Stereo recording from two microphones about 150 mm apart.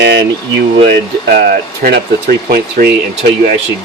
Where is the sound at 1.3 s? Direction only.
90° right.